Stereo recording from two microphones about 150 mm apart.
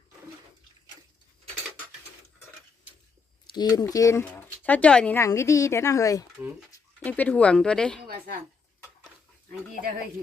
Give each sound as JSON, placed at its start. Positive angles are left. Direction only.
{"t": 3.5, "sound": "speech", "side_deg": 25}
{"t": 6.3, "sound": "speech", "side_deg": -10}
{"t": 7.0, "sound": "speech", "side_deg": 10}
{"t": 8.0, "sound": "a sound", "side_deg": -90}